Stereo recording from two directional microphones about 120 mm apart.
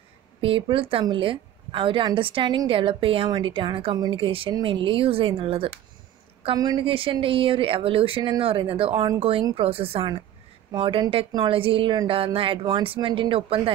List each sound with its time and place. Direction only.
0.4 s a woman's voice: 45° right (ahead or behind)
6.5 s a woman's voice: 35° right (ahead or behind)
6.8 s a woman's voice: 50° right (ahead or behind)